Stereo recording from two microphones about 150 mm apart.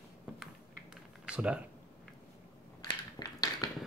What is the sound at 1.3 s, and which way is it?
Speech, 5° right (ahead or behind).